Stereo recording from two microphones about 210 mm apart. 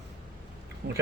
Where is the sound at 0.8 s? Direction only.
50° right (ahead or behind).